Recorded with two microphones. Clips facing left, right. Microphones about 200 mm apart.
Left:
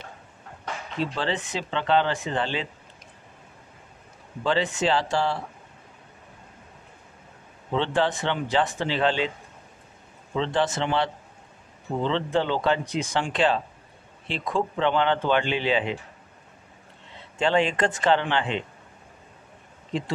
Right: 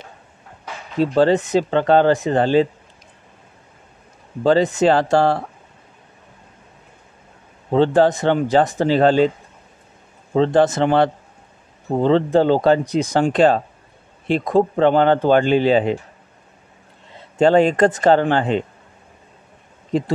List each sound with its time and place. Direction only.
0.9 s speech: 40° right (ahead or behind)
4.4 s speech: 40° right (ahead or behind)
7.7 s speech: 40° right (ahead or behind)
10.3 s speech: 45° right (ahead or behind)
17.4 s speech: 40° right (ahead or behind)
19.9 s speech: 40° right (ahead or behind)